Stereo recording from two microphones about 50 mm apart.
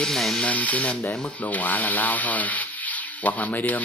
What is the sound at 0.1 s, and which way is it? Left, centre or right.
Speech, centre.